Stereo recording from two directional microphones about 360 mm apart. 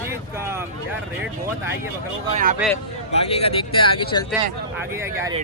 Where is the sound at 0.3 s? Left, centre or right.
Centre.